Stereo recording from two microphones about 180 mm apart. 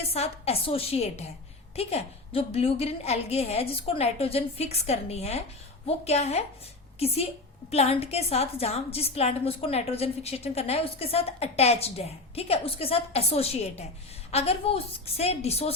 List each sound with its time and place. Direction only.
0.0 s a woman's voice: 35° left (ahead or behind)